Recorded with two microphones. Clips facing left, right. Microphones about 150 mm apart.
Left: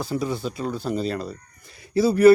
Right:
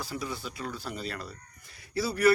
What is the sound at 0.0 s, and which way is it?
Speech, 25° left (ahead or behind).